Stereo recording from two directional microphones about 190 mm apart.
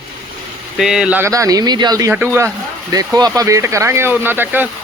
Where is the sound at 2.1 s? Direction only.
10° right (ahead or behind).